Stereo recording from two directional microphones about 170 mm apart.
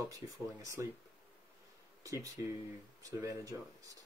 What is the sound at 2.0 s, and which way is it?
Speech, 20° right (ahead or behind).